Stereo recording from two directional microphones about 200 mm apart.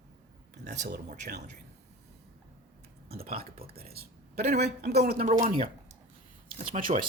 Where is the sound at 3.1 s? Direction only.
50° right (ahead or behind).